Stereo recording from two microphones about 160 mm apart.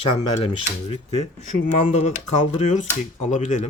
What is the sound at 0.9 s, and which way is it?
Speech, 45° left (ahead or behind).